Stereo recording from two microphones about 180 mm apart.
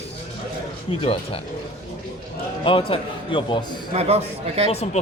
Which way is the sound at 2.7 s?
30° left (ahead or behind).